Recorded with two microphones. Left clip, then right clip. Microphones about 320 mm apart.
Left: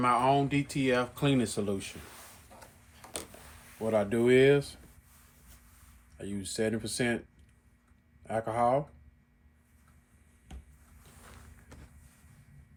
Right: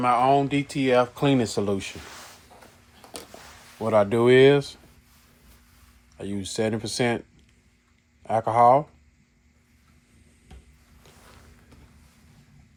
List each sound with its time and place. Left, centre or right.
0.0 s speech: centre
3.9 s speech: right
6.1 s speech: right
8.3 s speech: right